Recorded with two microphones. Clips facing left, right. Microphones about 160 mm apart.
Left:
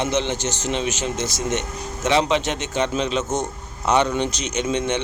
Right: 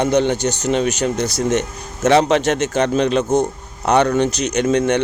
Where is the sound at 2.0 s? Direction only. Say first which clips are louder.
Right 6 dB; 45° right (ahead or behind).